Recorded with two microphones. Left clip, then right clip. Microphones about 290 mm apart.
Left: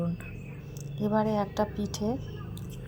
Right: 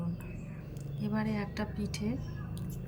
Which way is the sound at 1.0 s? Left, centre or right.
Left.